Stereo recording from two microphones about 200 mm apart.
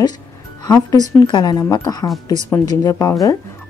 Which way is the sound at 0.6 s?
20° left (ahead or behind).